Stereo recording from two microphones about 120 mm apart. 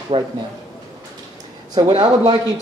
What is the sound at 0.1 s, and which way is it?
Speech, 50° right (ahead or behind).